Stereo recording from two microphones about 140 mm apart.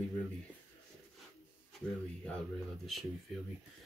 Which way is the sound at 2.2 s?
5° left (ahead or behind).